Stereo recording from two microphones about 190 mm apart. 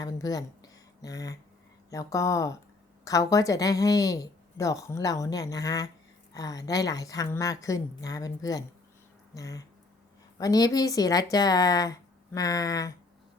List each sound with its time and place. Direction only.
0.0 s speech: 20° left (ahead or behind)